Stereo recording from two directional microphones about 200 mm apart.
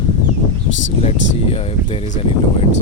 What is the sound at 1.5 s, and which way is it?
Speech, 30° left (ahead or behind).